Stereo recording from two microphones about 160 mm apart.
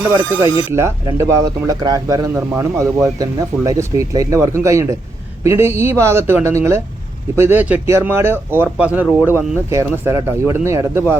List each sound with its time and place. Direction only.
0.1 s speech: 20° right (ahead or behind)